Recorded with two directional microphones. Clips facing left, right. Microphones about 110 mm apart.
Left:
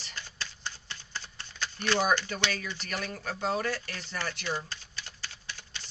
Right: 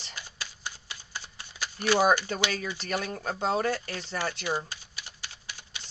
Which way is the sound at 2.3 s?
30° right (ahead or behind).